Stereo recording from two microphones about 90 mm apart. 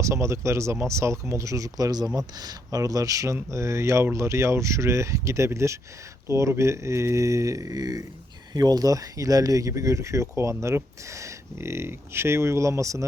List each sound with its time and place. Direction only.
0.0 s speech: 30° right (ahead or behind)